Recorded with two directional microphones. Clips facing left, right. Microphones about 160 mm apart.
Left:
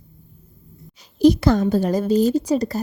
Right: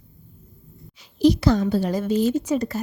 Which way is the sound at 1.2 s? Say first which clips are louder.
Left 3 dB; 50° left (ahead or behind).